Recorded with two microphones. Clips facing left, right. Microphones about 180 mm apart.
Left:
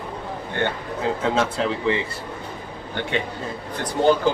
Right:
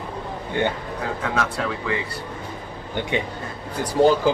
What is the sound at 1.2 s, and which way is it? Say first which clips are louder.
Speech: left 3 dB; 25° left (ahead or behind).